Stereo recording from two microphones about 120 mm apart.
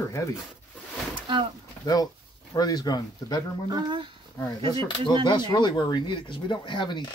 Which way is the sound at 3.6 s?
40° right (ahead or behind).